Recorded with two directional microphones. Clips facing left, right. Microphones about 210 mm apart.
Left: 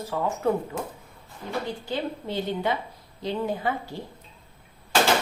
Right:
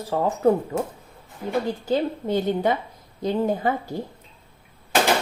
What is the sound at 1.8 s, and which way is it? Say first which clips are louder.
A woman's voice: right 7 dB; 45° right (ahead or behind).